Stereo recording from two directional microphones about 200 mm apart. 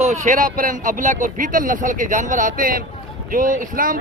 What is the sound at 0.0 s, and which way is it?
Speech, 35° right (ahead or behind).